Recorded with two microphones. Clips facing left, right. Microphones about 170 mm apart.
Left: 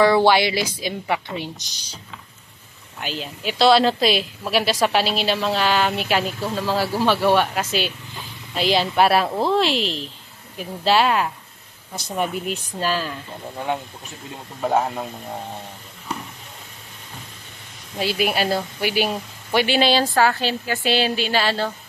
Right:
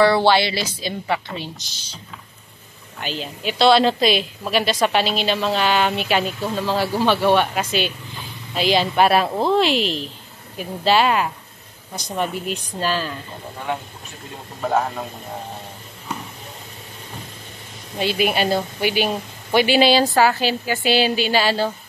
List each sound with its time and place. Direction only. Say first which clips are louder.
0.0 s a woman's voice: even; 10° left (ahead or behind)
3.0 s speech: right 1 dB; 5° left (ahead or behind)
12.7 s speech: right 1 dB; 5° left (ahead or behind)
14.6 s a woman's voice: even; 10° left (ahead or behind)
17.9 s speech: right 2 dB; centre (ahead or behind)